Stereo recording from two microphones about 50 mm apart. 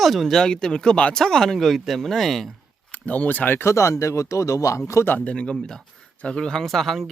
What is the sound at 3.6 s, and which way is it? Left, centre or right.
Speech, left.